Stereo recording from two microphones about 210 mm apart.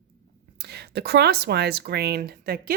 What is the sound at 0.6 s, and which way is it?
Speech, 50° right (ahead or behind).